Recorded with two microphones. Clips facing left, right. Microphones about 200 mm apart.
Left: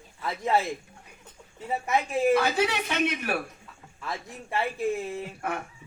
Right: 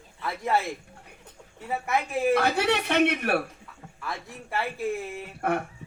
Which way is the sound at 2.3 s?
60° right (ahead or behind).